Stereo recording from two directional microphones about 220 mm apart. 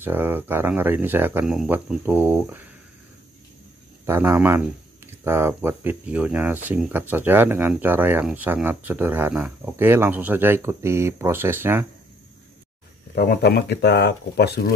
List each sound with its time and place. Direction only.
0.0 s speech: 10° right (ahead or behind)
4.0 s speech: 10° right (ahead or behind)
13.1 s speech: 45° left (ahead or behind)